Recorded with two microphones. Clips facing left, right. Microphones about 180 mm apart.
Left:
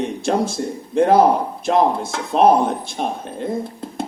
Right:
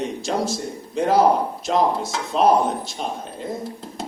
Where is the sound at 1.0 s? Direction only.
55° left (ahead or behind).